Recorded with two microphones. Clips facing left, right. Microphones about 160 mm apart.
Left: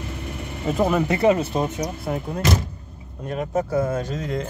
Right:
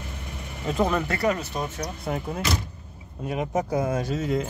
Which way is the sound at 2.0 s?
Centre (ahead or behind).